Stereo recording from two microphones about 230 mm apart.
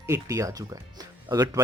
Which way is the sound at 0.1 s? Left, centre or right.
Centre.